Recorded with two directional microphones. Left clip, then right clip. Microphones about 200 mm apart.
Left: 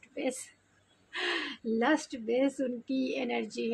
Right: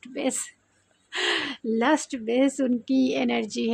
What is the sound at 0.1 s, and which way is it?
A woman's voice, 45° right (ahead or behind).